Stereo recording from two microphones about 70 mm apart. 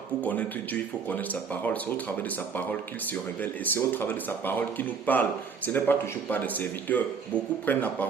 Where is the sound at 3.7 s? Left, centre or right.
Left.